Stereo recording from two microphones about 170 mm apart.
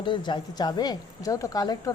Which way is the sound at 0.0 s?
30° left (ahead or behind).